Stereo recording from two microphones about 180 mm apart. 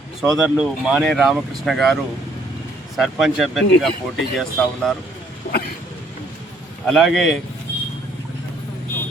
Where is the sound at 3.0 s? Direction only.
Centre (ahead or behind).